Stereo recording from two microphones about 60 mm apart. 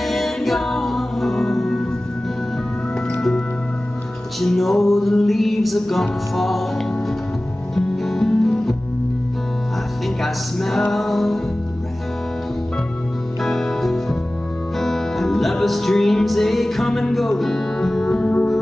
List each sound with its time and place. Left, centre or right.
0.0 s music: centre
3.2 s music: centre
7.7 s music: centre
10.0 s music: centre
13.4 s music: centre